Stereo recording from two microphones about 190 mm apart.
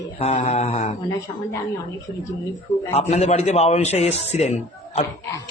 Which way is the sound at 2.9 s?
35° left (ahead or behind).